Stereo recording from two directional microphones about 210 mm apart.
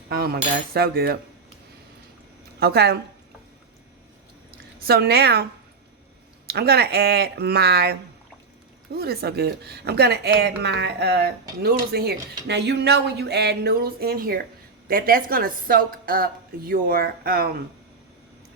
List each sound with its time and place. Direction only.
0.1 s speech: 45° right (ahead or behind)
2.6 s speech: 50° right (ahead or behind)
4.9 s speech: 50° right (ahead or behind)
6.5 s speech: 50° right (ahead or behind)